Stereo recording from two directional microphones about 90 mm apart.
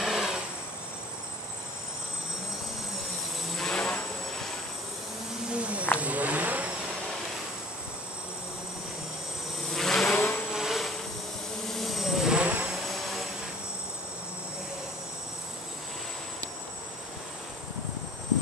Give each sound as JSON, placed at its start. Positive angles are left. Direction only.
{"t": 0.0, "sound": "vehicle", "side_deg": -5}
{"t": 3.5, "sound": "vehicle", "side_deg": 5}
{"t": 5.5, "sound": "a sound", "side_deg": -15}
{"t": 5.9, "sound": "vehicle", "side_deg": -15}
{"t": 9.8, "sound": "vehicle", "side_deg": 5}
{"t": 10.1, "sound": "vehicle", "side_deg": 20}
{"t": 10.5, "sound": "vehicle", "side_deg": -5}